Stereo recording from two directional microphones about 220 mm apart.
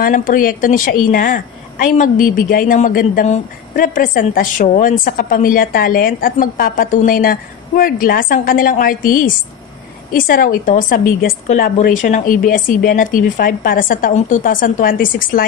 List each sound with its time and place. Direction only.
0.0 s a woman's voice: 40° left (ahead or behind)